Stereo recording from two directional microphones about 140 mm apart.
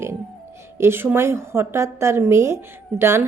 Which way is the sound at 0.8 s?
15° right (ahead or behind).